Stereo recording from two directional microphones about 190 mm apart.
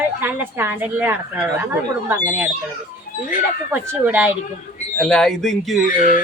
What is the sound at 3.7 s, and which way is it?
Speech, 10° right (ahead or behind).